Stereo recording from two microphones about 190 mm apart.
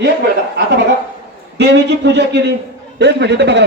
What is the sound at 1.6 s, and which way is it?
A man's voice, 65° right (ahead or behind).